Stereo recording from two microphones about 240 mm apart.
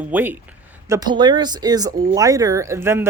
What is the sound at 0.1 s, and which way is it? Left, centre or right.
Speech, centre.